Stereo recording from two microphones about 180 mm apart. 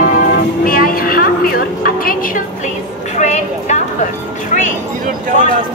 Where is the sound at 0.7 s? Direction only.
55° left (ahead or behind).